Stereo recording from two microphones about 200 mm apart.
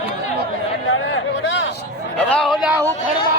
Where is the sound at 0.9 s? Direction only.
70° left (ahead or behind).